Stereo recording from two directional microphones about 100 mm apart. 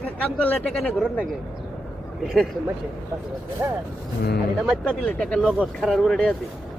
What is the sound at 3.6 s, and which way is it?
Speech, 20° right (ahead or behind).